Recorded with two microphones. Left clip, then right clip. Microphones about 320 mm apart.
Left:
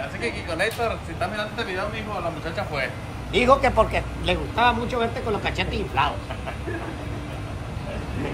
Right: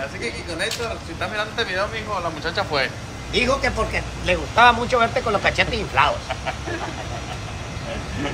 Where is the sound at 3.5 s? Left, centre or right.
Centre.